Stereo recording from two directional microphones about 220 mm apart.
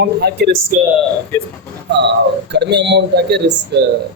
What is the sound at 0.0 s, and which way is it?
Speech, 50° right (ahead or behind).